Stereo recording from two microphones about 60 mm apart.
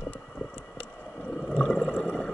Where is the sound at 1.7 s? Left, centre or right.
Left.